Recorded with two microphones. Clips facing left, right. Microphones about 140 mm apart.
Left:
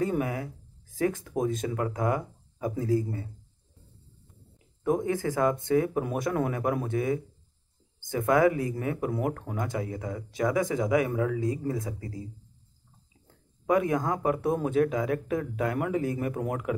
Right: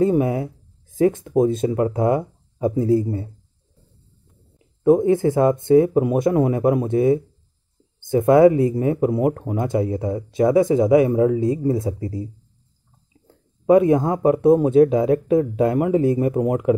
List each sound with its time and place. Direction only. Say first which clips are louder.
0.0 s speech: right 10 dB; 25° right (ahead or behind)
4.8 s speech: right 11 dB; 25° right (ahead or behind)
13.7 s speech: right 10 dB; 30° right (ahead or behind)